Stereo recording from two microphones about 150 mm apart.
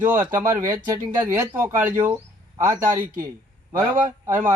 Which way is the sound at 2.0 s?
15° right (ahead or behind).